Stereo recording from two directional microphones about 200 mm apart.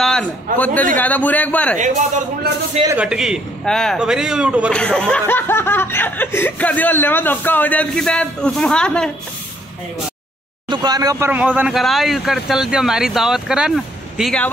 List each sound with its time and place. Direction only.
0.0 s a man's voice: 5° left (ahead or behind)
0.9 s snicker: 10° left (ahead or behind)
1.8 s a man's voice: 40° right (ahead or behind)
3.0 s speech: 5° right (ahead or behind)
4.7 s snicker: 5° left (ahead or behind)
10.7 s speech: 20° right (ahead or behind); by 14.5 s centre (ahead or behind)